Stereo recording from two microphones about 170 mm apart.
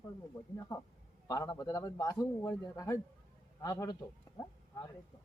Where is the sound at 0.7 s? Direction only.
20° left (ahead or behind).